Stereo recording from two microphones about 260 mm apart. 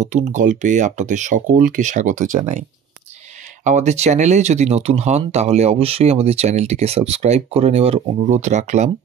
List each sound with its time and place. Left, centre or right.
0.0 s speech: right
3.6 s speech: right